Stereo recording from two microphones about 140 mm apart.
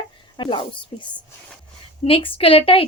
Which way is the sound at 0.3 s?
35° left (ahead or behind).